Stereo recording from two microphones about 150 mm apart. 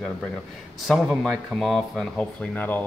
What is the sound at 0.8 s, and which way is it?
Speech, centre (ahead or behind).